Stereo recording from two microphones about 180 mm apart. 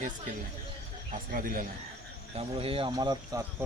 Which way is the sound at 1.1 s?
50° right (ahead or behind).